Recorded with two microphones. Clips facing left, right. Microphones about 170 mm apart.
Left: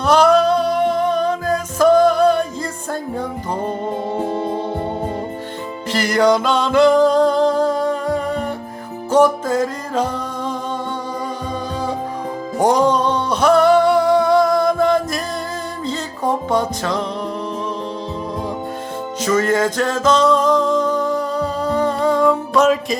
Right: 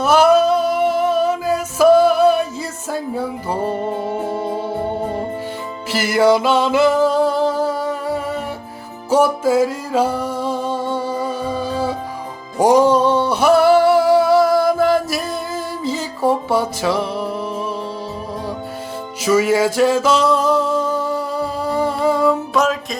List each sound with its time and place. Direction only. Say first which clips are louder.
0.0 s music: right 1 dB; 5° right (ahead or behind)
5.9 s music: right 1 dB; 5° right (ahead or behind)
19.2 s music: right 2 dB; 10° right (ahead or behind)